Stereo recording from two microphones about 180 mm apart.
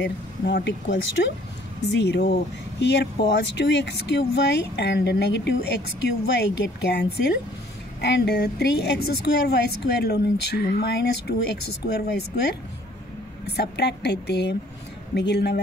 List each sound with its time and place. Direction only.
0.0 s a woman's voice: 80° left; by 15.6 s 65° left (ahead or behind)